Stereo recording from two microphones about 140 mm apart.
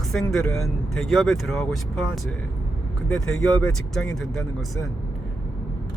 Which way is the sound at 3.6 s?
5° left (ahead or behind).